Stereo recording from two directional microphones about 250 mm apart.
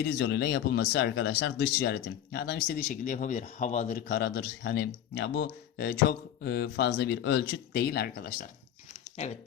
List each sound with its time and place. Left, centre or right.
0.2 s speech: left
9.1 s speech: left